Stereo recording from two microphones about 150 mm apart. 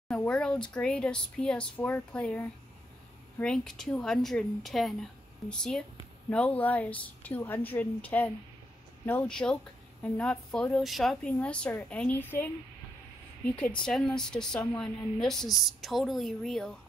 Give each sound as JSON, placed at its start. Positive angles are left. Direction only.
{"t": 0.1, "sound": "a woman's voice", "side_deg": 5}
{"t": 13.8, "sound": "a woman's voice", "side_deg": 5}